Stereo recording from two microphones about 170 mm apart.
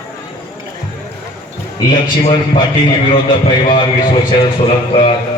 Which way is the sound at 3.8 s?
25° left (ahead or behind).